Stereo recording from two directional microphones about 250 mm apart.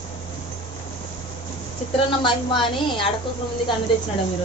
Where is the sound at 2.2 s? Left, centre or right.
Centre.